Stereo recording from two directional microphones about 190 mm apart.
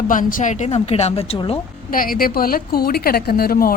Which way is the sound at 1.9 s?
50° left (ahead or behind).